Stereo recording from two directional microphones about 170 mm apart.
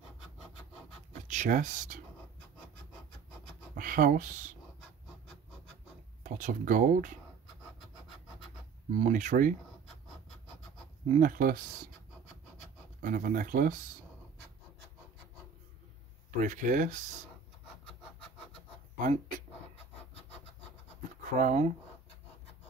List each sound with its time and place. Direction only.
1.2 s speech: 45° right (ahead or behind)
3.7 s speech: 50° right (ahead or behind)
6.2 s speech: 50° right (ahead or behind)
8.9 s speech: 45° right (ahead or behind)
11.1 s speech: 50° right (ahead or behind)
13.0 s speech: 50° right (ahead or behind)
16.3 s speech: 50° right (ahead or behind)
18.9 s speech: 50° right (ahead or behind)
21.4 s speech: 45° right (ahead or behind)